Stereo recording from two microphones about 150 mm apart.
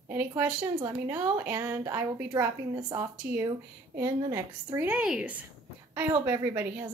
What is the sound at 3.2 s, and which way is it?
Speech, 10° right (ahead or behind).